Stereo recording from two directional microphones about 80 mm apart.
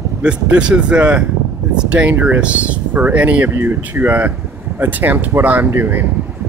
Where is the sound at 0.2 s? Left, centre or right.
Centre.